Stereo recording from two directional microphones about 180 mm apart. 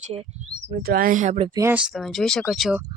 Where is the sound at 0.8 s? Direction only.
55° right (ahead or behind).